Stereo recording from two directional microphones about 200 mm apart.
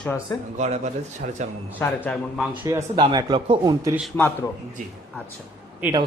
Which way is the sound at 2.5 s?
20° right (ahead or behind).